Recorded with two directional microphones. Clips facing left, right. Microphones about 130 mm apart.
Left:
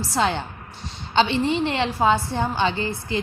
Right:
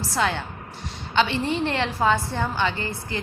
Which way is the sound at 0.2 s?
25° left (ahead or behind).